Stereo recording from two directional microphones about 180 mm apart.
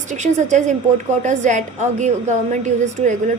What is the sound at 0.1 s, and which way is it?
A woman's voice, 40° right (ahead or behind).